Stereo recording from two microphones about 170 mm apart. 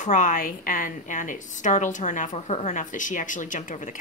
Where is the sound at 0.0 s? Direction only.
50° left (ahead or behind).